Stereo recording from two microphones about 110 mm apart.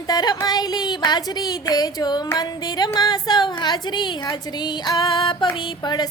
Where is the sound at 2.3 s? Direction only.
35° left (ahead or behind).